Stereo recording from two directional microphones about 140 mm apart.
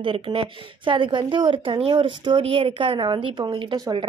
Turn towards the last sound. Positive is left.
turn(degrees=-35)  # may be behind; listen again after turning